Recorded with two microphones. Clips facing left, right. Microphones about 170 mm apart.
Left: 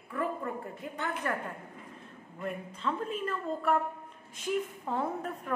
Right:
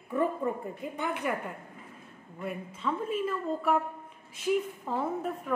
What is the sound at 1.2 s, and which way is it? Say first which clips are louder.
Speech: right 2 dB; 10° right (ahead or behind).